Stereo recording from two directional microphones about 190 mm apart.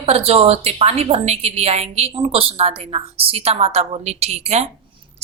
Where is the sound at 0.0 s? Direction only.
30° right (ahead or behind).